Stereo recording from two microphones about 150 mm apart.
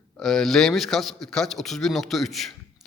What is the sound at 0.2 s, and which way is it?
A man's voice, centre (ahead or behind).